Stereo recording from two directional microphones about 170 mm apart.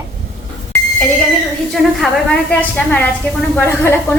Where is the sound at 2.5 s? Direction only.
10° left (ahead or behind).